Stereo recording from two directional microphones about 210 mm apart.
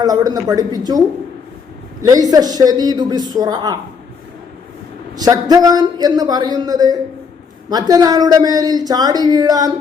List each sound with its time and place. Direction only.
0.0 s speech: 20° right (ahead or behind)
5.1 s speech: 15° right (ahead or behind)